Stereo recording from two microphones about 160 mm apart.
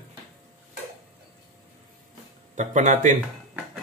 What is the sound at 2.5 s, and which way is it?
Speech, 50° right (ahead or behind).